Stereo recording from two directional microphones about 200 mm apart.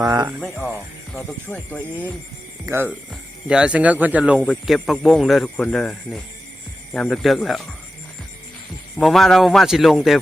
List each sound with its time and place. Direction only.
0.0 s speech: 15° right (ahead or behind)
0.3 s speech: centre (ahead or behind)
2.6 s speech: 10° right (ahead or behind)
9.0 s speech: centre (ahead or behind)